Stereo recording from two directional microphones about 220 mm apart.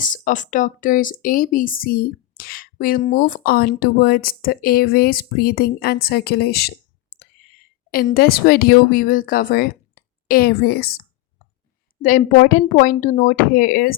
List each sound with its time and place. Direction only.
0.0 s speech: 35° left (ahead or behind)
12.0 s speech: 40° left (ahead or behind)